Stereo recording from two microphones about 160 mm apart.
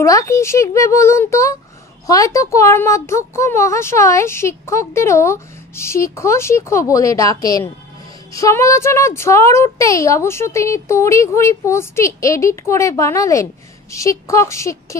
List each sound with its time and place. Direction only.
0.0 s a woman's voice: 20° left (ahead or behind)